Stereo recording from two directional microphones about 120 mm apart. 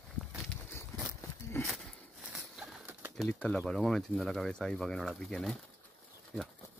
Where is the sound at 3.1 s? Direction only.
5° left (ahead or behind).